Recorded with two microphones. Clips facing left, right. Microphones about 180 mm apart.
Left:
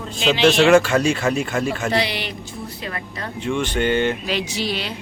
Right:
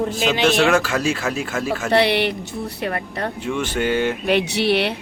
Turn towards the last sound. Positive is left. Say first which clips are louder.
# right 7 dB
turn(degrees=-65)  # may be behind; listen again after turning